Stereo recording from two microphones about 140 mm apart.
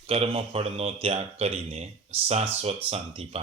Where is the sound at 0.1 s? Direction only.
45° right (ahead or behind).